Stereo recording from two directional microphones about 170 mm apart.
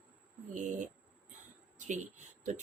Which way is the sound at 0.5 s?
50° right (ahead or behind).